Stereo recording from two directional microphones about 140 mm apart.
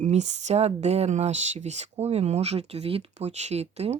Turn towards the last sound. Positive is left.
turn(degrees=-50)  # may be behind; listen again after turning